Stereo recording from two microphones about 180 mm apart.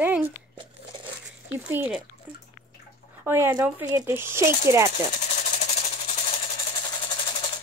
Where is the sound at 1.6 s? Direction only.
10° right (ahead or behind).